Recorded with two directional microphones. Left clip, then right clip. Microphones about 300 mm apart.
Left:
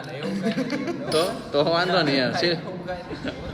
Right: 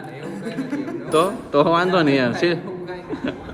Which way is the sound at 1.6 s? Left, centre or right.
Centre.